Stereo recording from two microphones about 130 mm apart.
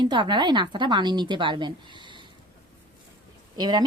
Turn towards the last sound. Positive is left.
turn(degrees=-30)  # may be behind; listen again after turning